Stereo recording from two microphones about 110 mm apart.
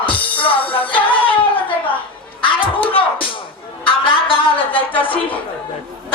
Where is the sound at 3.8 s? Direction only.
50° left (ahead or behind).